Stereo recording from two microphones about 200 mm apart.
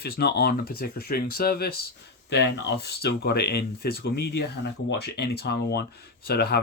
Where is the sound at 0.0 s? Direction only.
50° left (ahead or behind).